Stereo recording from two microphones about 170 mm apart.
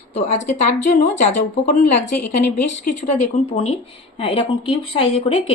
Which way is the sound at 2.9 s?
60° left (ahead or behind).